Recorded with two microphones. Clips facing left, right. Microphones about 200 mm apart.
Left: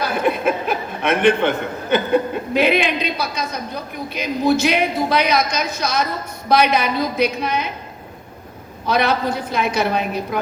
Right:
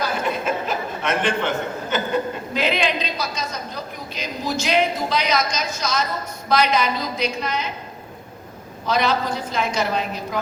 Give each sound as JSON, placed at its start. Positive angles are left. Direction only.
{"t": 0.0, "sound": "chuckle", "side_deg": 60}
{"t": 2.5, "sound": "a sound", "side_deg": 60}
{"t": 4.1, "sound": "a woman's voice", "side_deg": 60}
{"t": 8.9, "sound": "a woman's voice", "side_deg": 60}